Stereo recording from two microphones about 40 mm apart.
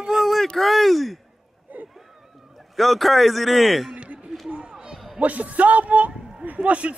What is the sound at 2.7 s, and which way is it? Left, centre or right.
Speech, centre.